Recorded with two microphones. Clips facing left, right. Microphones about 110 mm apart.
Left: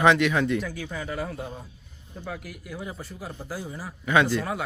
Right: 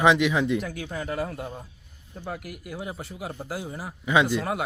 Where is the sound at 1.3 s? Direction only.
15° right (ahead or behind).